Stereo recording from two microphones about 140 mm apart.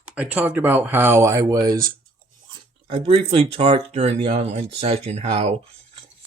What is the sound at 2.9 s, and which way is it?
Speech, 40° right (ahead or behind).